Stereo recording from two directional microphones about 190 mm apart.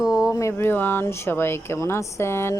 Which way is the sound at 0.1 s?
20° left (ahead or behind).